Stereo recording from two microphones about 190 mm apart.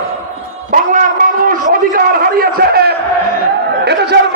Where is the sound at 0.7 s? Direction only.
45° right (ahead or behind).